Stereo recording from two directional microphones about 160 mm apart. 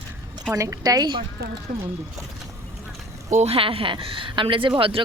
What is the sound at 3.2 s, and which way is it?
Speech, 45° right (ahead or behind).